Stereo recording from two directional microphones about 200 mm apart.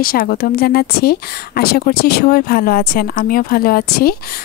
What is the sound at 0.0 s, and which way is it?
Speech, 45° left (ahead or behind).